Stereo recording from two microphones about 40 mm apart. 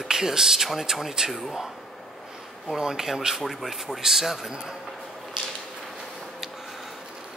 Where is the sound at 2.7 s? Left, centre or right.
Centre.